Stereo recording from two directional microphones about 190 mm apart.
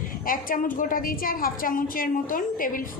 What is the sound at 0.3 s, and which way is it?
A woman's voice, 45° left (ahead or behind).